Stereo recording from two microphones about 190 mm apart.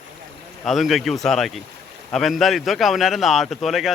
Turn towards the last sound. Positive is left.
turn(degrees=0)  # may be behind; listen again after turning